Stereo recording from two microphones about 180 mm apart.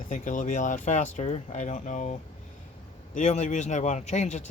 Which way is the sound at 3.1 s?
40° left (ahead or behind).